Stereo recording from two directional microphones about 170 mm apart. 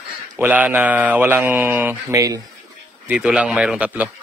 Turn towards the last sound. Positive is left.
turn(degrees=-5)  # may be behind; listen again after turning